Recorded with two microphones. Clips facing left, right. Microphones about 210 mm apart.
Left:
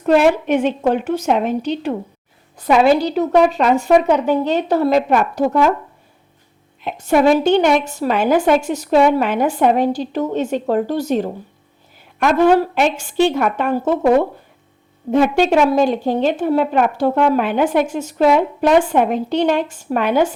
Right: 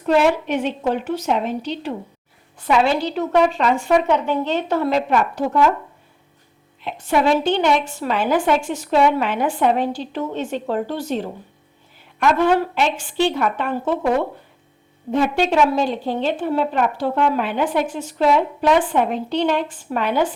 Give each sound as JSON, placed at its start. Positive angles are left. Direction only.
{"t": 0.0, "sound": "a woman's voice", "side_deg": 55}
{"t": 6.8, "sound": "a woman's voice", "side_deg": 45}